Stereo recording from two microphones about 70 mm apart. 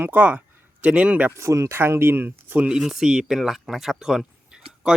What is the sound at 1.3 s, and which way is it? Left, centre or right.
Speech, right.